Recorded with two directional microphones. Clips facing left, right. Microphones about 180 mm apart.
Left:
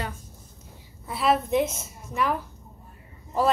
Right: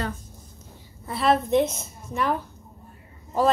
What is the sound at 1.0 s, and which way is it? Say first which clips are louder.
A woman's voice: right 2 dB; 5° left (ahead or behind).